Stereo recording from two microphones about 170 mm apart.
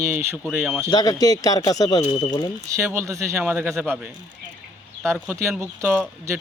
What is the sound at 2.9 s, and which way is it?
Speech, 20° right (ahead or behind).